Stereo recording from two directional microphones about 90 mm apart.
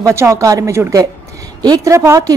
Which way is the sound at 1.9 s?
35° right (ahead or behind).